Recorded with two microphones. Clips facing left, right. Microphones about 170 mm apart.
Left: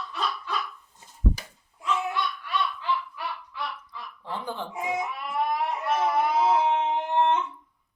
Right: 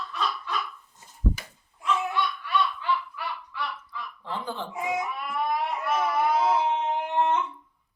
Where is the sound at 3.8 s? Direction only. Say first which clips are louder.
Right 2 dB; 15° left (ahead or behind).